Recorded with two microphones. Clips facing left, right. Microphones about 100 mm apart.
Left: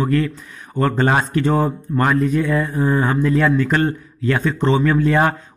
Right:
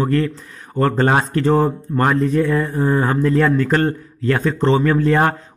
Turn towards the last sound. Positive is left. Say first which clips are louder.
# right 1 dB
turn(degrees=-40)  # may be behind; listen again after turning